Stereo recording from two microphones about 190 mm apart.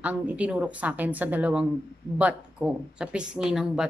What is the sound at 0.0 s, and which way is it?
A woman's voice, 5° right (ahead or behind).